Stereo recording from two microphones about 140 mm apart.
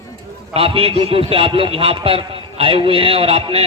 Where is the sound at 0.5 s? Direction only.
40° right (ahead or behind).